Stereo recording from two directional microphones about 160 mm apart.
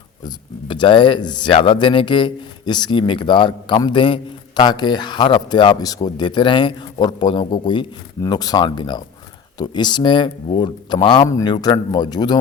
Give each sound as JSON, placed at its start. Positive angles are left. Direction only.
{"t": 0.2, "sound": "speech", "side_deg": 25}